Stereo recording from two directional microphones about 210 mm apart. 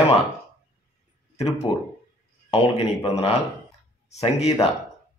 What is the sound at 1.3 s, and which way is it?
A man's voice, 30° left (ahead or behind).